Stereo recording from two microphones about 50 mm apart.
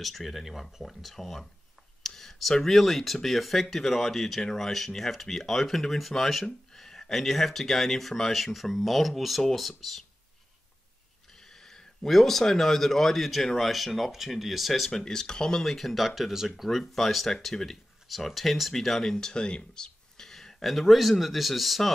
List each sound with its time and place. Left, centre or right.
0.0 s speech: centre
11.3 s speech: centre
14.9 s speech: centre